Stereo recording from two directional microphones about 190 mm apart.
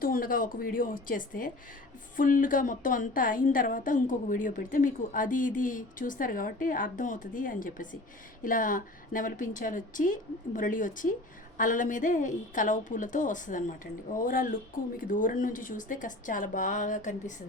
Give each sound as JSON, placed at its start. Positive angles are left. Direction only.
{"t": 0.0, "sound": "a woman's voice", "side_deg": 50}